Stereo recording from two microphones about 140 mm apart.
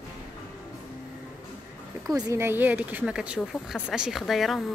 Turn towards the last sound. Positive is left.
turn(degrees=0)  # may be behind; listen again after turning